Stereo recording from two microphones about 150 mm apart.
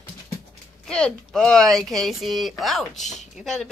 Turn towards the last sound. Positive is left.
turn(degrees=0)  # may be behind; listen again after turning